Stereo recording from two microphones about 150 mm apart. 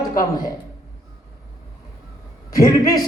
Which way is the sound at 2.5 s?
25° left (ahead or behind).